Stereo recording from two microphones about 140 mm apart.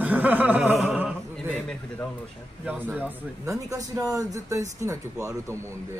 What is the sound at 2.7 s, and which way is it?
Speech, 15° right (ahead or behind).